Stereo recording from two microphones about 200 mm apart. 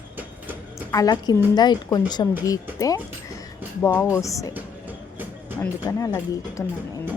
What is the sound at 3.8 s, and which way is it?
Speech, 15° left (ahead or behind).